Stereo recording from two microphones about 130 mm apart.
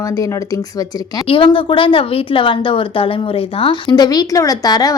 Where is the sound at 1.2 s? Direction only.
40° left (ahead or behind).